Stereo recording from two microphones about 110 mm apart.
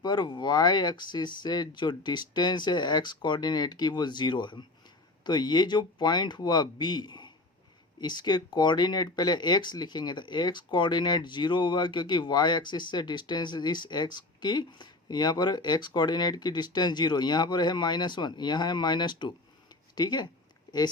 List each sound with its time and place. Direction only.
0.0 s speech: 40° left (ahead or behind)